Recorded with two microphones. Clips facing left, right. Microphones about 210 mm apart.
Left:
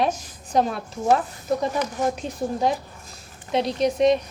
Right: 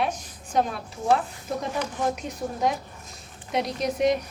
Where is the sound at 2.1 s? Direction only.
30° left (ahead or behind).